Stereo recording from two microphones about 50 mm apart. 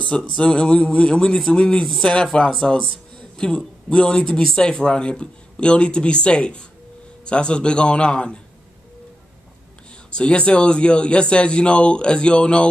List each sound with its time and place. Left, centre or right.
0.3 s a man's voice: centre
10.1 s speech: left